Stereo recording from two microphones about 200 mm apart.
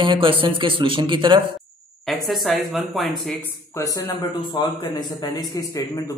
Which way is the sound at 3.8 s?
15° left (ahead or behind).